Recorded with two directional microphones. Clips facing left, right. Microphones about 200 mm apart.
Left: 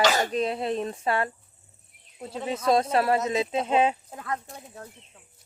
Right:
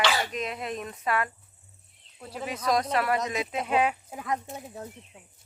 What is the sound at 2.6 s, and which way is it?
Speech, 25° left (ahead or behind).